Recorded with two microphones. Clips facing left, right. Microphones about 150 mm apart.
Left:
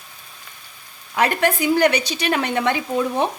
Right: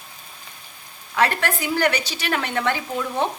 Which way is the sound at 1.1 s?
15° left (ahead or behind).